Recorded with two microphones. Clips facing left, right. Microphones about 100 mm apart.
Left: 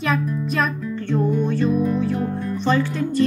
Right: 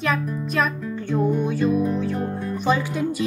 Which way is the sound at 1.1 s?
10° right (ahead or behind).